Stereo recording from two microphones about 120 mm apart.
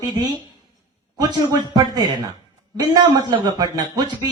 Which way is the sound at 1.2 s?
35° right (ahead or behind).